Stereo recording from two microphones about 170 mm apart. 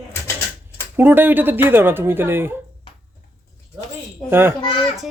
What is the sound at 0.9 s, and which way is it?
Speech, 10° right (ahead or behind).